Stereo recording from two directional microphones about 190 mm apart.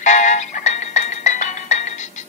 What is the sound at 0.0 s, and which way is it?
Music, 40° left (ahead or behind).